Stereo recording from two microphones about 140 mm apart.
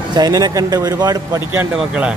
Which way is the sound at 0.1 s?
30° right (ahead or behind).